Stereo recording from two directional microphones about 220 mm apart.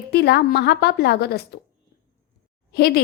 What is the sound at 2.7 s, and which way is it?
Speech, 45° left (ahead or behind).